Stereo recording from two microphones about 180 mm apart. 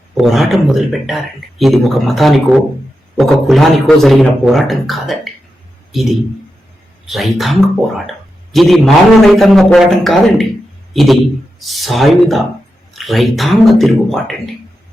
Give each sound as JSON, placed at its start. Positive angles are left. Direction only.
{"t": 0.2, "sound": "a man's voice", "side_deg": 0}